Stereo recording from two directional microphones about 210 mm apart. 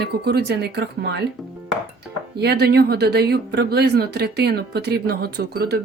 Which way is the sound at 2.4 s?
50° right (ahead or behind).